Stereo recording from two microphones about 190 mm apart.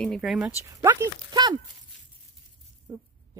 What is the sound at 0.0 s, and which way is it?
Speech, centre (ahead or behind).